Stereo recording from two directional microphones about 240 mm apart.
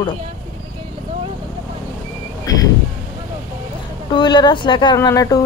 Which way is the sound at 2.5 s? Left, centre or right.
Centre.